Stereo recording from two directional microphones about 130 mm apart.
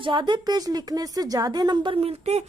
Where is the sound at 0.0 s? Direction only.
35° right (ahead or behind).